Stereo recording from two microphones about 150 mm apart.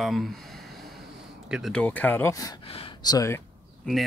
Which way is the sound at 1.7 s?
10° left (ahead or behind).